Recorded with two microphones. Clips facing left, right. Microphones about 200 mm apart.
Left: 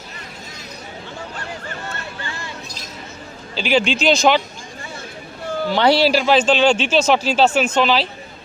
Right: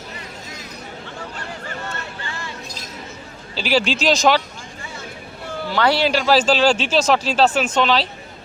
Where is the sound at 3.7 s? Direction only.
40° right (ahead or behind).